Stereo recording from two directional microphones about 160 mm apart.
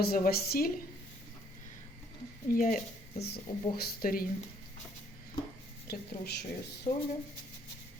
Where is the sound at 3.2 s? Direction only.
80° left.